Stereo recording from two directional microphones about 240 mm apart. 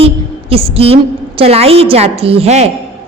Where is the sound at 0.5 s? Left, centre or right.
Right.